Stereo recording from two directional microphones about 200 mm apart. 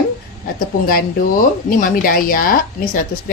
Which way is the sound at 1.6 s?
45° left (ahead or behind).